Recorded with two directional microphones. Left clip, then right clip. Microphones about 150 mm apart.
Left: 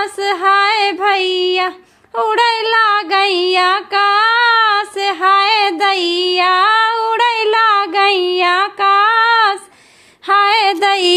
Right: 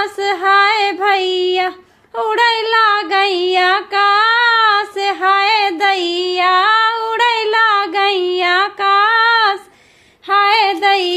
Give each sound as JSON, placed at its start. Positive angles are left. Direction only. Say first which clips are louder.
{"t": 0.0, "sound": "female singing", "louder": "left 1 dB", "side_deg": 20}
{"t": 2.1, "sound": "child singing", "louder": "left 1 dB", "side_deg": 20}
{"t": 10.2, "sound": "music", "louder": "left 1 dB", "side_deg": 45}